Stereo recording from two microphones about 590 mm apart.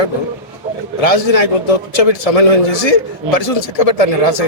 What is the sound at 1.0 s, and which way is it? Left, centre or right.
A man's voice, left.